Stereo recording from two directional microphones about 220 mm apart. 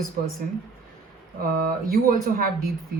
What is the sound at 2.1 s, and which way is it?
Speech, 40° right (ahead or behind).